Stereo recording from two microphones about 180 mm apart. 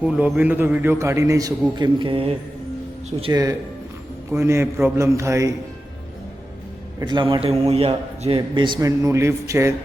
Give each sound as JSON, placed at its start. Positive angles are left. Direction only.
{"t": 0.0, "sound": "a man's voice", "side_deg": -5}
{"t": 7.0, "sound": "a man's voice", "side_deg": -25}